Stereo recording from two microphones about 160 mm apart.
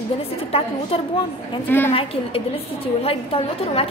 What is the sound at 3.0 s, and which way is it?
Speech, 35° left (ahead or behind).